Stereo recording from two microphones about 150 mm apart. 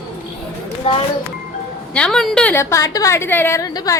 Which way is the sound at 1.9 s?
5° left (ahead or behind).